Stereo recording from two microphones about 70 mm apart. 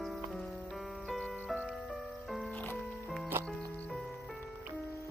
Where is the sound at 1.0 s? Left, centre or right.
Centre.